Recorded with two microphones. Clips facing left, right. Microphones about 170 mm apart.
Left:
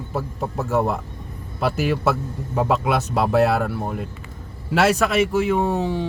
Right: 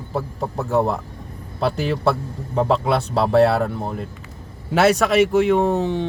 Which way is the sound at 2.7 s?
30° right (ahead or behind).